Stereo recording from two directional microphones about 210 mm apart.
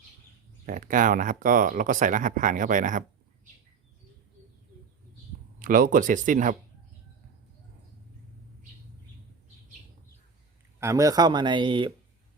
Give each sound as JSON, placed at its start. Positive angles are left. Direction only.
{"t": 0.6, "sound": "speech", "side_deg": -40}
{"t": 5.5, "sound": "speech", "side_deg": -40}
{"t": 10.8, "sound": "speech", "side_deg": -15}